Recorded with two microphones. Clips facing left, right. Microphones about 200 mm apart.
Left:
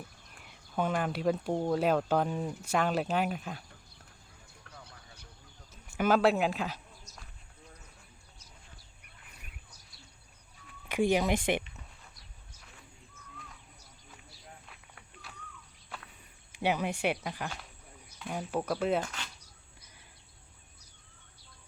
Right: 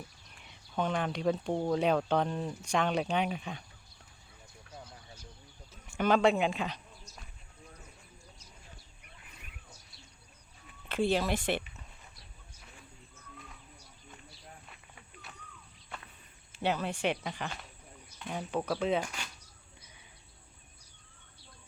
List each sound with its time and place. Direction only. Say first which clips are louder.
0.4 s speech: left 1 dB; 5° left (ahead or behind)
6.0 s speech: even; 5° left (ahead or behind)
10.8 s speech: left 2 dB; 15° left (ahead or behind)
14.7 s snake: even; centre (ahead or behind)
16.5 s speech: left 2 dB; 15° left (ahead or behind)
19.0 s speech: even; 10° right (ahead or behind)